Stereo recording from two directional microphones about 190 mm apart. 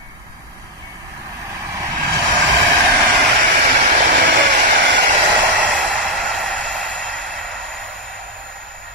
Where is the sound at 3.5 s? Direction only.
45° right (ahead or behind).